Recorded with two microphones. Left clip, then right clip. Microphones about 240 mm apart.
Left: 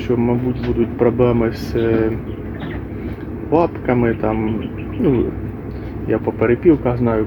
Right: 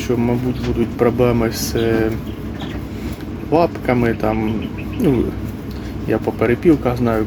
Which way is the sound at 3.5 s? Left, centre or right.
Centre.